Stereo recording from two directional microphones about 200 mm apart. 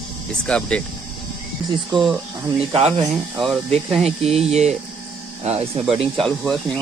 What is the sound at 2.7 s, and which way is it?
Speech, 25° right (ahead or behind).